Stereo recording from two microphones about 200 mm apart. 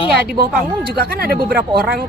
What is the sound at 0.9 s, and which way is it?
Speech, 50° right (ahead or behind).